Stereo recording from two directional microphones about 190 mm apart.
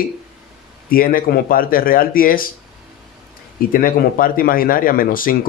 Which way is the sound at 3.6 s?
50° left (ahead or behind).